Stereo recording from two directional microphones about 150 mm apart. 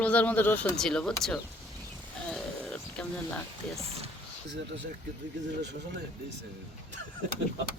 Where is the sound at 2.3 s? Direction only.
5° left (ahead or behind).